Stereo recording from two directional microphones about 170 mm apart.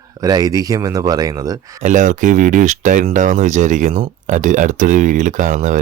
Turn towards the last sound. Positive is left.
turn(degrees=-45)  # may be behind; listen again after turning